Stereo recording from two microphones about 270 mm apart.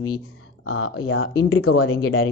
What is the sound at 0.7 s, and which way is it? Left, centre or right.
Speech, left.